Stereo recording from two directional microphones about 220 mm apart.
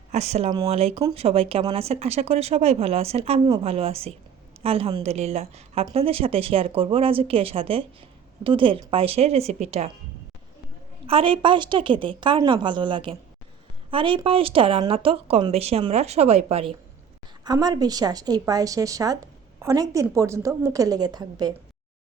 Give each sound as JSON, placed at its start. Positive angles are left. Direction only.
{"t": 0.1, "sound": "speech", "side_deg": -30}
{"t": 11.0, "sound": "speech", "side_deg": -25}
{"t": 17.4, "sound": "a woman's voice", "side_deg": -15}